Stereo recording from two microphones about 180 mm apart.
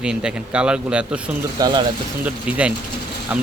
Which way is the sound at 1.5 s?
25° right (ahead or behind).